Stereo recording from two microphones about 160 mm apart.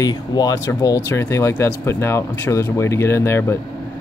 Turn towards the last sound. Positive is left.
turn(degrees=15)  # may be behind; listen again after turning